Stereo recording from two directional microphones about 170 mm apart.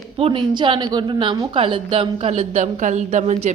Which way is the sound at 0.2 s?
30° right (ahead or behind).